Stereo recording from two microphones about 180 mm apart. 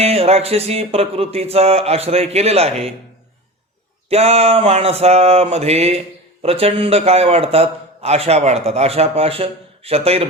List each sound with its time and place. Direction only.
0.0 s a man's voice: 35° right (ahead or behind)
4.1 s a man's voice: 35° right (ahead or behind)